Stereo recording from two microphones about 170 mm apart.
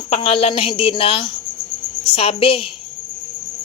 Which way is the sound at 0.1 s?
35° left (ahead or behind).